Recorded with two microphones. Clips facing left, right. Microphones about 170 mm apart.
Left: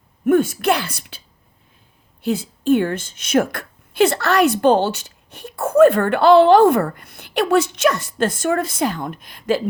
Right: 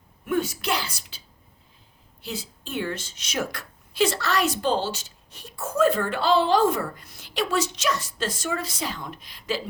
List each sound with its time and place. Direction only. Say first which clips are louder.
0.3 s a woman's voice: left 10 dB; 50° left (ahead or behind)
2.2 s a woman's voice: left 16 dB; 55° left (ahead or behind)